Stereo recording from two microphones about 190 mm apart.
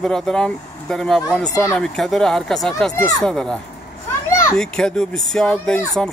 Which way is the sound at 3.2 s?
5° left (ahead or behind).